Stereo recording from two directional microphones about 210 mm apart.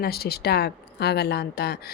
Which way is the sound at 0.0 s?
50° left (ahead or behind).